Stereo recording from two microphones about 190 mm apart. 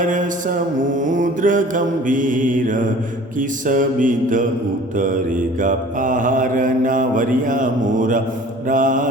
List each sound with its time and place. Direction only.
0.0 s mantra: 45° right (ahead or behind)
5.6 s mantra: 45° right (ahead or behind)